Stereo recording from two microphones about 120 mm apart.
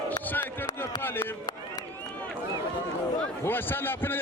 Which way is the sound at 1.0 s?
20° left (ahead or behind).